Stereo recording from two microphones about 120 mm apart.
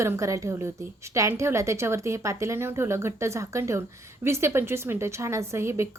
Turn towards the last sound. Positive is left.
turn(degrees=-20)  # may be behind; listen again after turning